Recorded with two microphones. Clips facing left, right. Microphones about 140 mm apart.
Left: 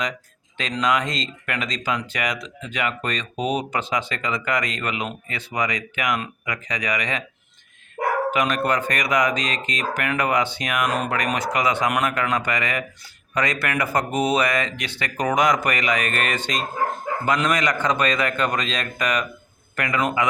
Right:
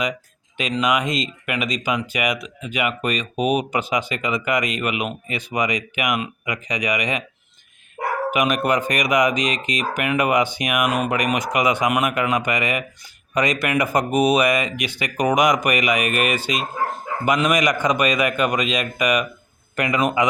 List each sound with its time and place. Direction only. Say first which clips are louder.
0.5 s speech: right 2 dB; 10° right (ahead or behind)
8.3 s speech: right 2 dB; 15° right (ahead or behind)